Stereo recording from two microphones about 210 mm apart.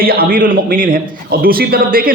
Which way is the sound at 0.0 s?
45° right (ahead or behind).